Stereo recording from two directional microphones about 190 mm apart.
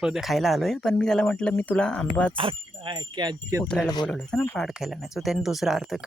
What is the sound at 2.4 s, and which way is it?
Speech, 25° right (ahead or behind).